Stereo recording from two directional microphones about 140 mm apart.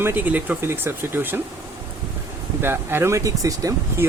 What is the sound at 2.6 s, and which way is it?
Speech, 15° right (ahead or behind).